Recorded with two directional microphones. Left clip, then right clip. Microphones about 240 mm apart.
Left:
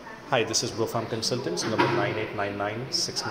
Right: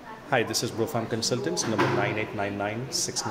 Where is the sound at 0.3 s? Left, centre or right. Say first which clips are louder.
Left 1 dB; centre.